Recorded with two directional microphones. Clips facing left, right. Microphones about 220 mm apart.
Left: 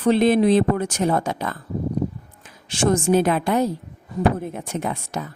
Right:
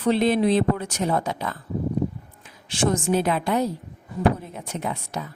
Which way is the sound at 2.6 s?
45° left (ahead or behind).